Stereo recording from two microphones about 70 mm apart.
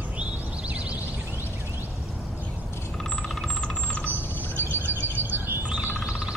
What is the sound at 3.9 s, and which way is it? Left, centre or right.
Bird, left.